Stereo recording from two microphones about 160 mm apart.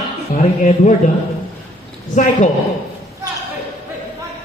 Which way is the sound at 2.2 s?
50° left (ahead or behind).